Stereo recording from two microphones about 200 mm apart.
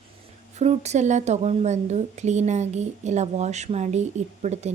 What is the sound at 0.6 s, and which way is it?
Speech, 35° right (ahead or behind).